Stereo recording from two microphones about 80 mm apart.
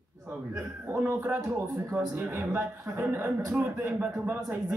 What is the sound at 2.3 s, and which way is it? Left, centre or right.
A man's voice, right.